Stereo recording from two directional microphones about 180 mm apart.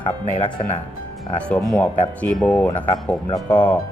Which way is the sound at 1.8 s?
10° left (ahead or behind).